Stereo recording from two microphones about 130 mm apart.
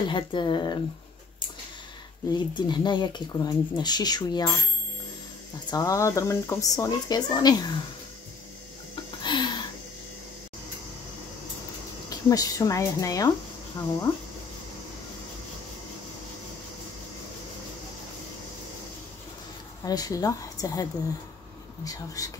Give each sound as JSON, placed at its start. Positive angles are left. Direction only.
{"t": 0.1, "sound": "speech", "side_deg": 40}
{"t": 2.3, "sound": "speech", "side_deg": 35}
{"t": 5.7, "sound": "speech", "side_deg": 25}
{"t": 9.2, "sound": "a sound", "side_deg": 35}
{"t": 12.1, "sound": "speech", "side_deg": 25}
{"t": 19.8, "sound": "speech", "side_deg": 30}
{"t": 21.8, "sound": "speech", "side_deg": 25}